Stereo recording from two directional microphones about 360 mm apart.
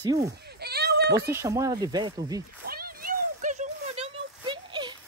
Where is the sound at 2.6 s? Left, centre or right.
Right.